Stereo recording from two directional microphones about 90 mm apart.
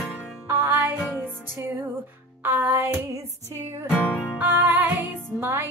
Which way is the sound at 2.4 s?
25° right (ahead or behind).